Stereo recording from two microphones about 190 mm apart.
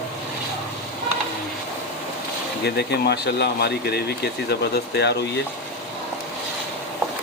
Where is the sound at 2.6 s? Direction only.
60° left (ahead or behind).